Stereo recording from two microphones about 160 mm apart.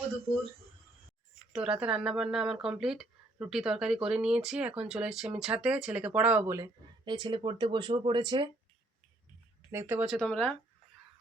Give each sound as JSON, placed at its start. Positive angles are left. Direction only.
{"t": 1.5, "sound": "speech", "side_deg": -5}
{"t": 6.6, "sound": "speech", "side_deg": -30}
{"t": 9.7, "sound": "speech", "side_deg": -10}
{"t": 10.2, "sound": "speech", "side_deg": 10}